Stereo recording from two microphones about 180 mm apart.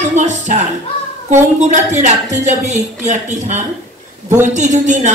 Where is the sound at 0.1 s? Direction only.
40° right (ahead or behind).